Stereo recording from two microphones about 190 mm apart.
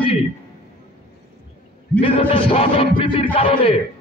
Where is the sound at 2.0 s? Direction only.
25° left (ahead or behind).